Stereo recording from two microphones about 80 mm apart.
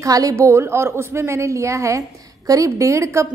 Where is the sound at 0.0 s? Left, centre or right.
Right.